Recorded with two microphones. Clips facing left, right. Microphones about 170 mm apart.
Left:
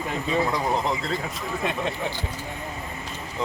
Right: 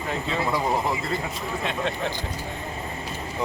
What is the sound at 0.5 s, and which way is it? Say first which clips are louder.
Speech: even; 5° right (ahead or behind).